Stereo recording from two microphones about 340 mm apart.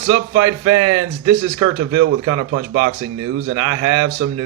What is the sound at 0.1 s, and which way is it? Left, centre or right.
A man's voice, right.